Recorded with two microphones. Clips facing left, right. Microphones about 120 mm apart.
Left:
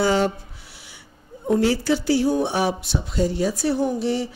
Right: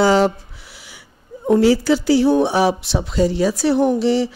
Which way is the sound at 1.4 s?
90° right.